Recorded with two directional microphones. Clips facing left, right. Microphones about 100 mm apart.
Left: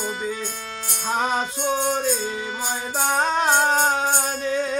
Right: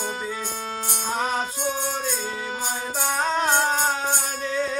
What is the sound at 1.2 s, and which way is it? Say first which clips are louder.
Music: left 3 dB; 20° left (ahead or behind).